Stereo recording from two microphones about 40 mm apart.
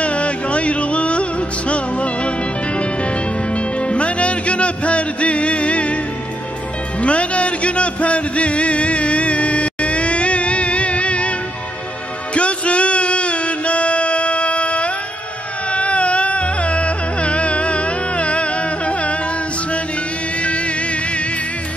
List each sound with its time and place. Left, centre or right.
0.0 s music: left
7.0 s music: left
12.4 s music: left
20.4 s motorboat: left